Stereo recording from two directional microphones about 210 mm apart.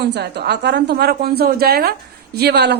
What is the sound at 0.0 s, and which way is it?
A woman's voice, 50° right (ahead or behind).